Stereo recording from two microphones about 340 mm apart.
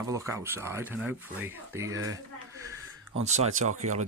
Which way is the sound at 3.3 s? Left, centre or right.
Centre.